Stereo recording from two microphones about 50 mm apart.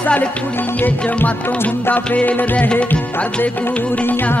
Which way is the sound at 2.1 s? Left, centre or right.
Left.